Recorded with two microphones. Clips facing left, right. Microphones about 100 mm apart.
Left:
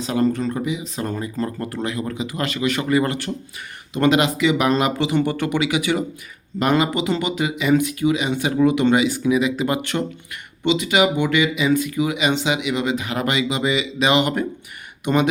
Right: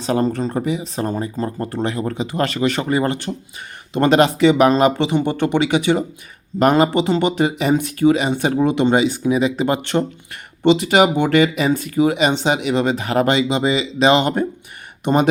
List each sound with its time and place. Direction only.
0.0 s speech: 35° right (ahead or behind)
6.6 s speech: 40° right (ahead or behind)
13.2 s speech: 30° right (ahead or behind)
15.0 s speech: 40° right (ahead or behind)